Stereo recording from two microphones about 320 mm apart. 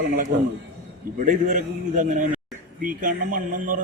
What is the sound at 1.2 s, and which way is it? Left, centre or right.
A man's voice, right.